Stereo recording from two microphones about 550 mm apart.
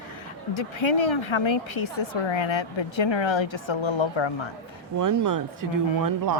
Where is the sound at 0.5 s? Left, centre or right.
Left.